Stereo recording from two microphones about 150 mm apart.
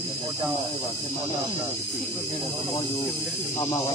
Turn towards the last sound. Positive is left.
turn(degrees=25)  # may be behind; listen again after turning